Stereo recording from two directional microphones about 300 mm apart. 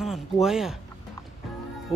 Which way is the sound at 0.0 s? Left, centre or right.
Centre.